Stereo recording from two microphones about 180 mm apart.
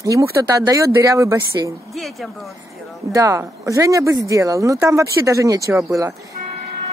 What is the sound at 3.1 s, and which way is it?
Speech, 15° right (ahead or behind).